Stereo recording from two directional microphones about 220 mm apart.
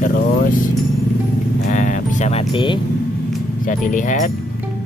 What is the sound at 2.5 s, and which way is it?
Speech, 20° left (ahead or behind).